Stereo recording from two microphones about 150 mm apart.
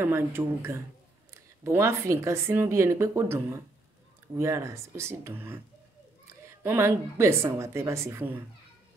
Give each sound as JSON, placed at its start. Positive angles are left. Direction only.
{"t": 0.0, "sound": "speech", "side_deg": -15}